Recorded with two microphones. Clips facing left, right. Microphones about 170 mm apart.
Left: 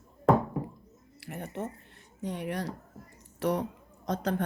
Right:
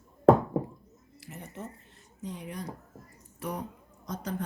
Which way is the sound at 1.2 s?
65° left (ahead or behind).